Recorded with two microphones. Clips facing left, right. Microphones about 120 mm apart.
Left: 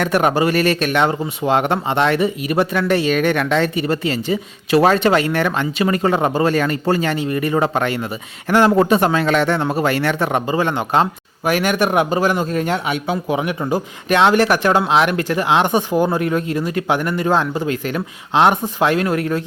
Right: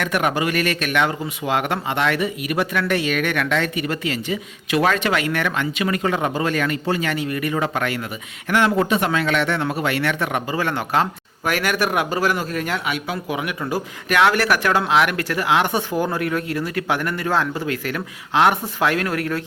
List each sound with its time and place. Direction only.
0.0 s a man's voice: 35° left (ahead or behind)